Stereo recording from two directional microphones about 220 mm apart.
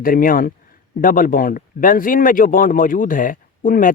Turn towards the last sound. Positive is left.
turn(degrees=40)  # may be behind; listen again after turning